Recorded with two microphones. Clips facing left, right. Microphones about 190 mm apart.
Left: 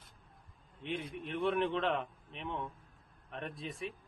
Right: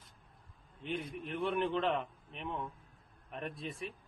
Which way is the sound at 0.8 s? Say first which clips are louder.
Even; centre (ahead or behind).